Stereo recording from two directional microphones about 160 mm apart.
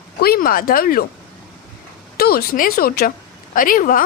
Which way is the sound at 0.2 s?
70° left (ahead or behind).